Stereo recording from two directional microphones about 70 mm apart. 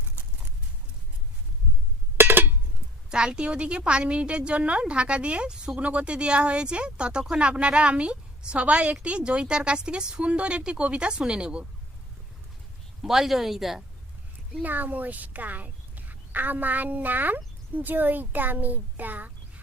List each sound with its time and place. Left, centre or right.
2.1 s music: right
3.1 s a woman's voice: centre
13.0 s speech: centre
14.6 s speech: right